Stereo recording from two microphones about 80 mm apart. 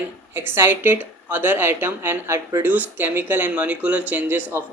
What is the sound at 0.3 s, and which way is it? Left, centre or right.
Speech, right.